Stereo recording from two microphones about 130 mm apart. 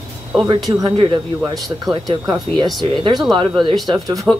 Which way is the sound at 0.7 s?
30° right (ahead or behind).